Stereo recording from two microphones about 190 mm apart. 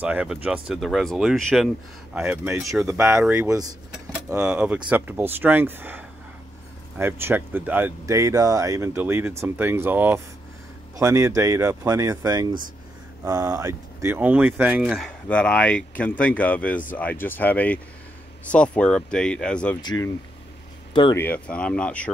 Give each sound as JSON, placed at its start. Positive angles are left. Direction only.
{"t": 0.0, "sound": "speech", "side_deg": -5}
{"t": 4.3, "sound": "speech", "side_deg": -5}
{"t": 19.8, "sound": "speech", "side_deg": 25}
{"t": 21.2, "sound": "speech", "side_deg": 10}